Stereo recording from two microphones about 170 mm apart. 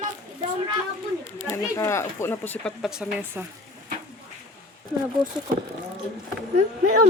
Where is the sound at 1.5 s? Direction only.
15° left (ahead or behind).